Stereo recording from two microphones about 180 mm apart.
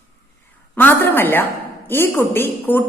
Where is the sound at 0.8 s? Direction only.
10° left (ahead or behind).